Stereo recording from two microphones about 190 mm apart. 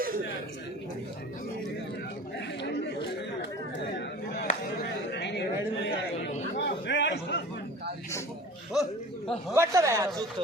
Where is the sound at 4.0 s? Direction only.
65° left (ahead or behind).